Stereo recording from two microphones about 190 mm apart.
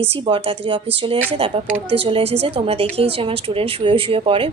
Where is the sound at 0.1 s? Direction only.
25° right (ahead or behind).